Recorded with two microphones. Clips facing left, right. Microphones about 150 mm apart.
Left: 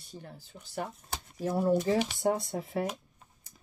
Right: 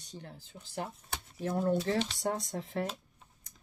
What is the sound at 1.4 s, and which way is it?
Speech, 5° left (ahead or behind).